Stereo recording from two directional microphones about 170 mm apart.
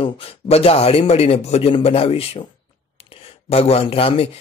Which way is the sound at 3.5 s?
35° left (ahead or behind).